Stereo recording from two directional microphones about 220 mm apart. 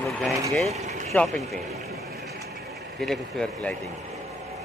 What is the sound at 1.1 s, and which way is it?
Speech, centre (ahead or behind).